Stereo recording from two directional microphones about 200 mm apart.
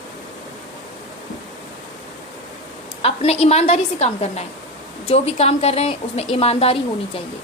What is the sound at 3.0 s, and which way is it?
A woman's voice, 30° left (ahead or behind).